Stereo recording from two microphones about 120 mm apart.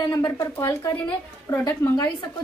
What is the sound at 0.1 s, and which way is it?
A woman's voice, 25° left (ahead or behind).